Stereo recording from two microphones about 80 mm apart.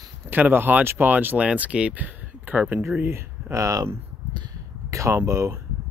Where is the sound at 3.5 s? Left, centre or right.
Right.